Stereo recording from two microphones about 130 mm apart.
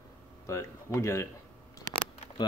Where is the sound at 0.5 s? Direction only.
20° left (ahead or behind).